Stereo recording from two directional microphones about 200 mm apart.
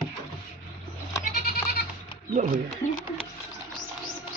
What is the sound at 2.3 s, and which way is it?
Speech, 40° right (ahead or behind).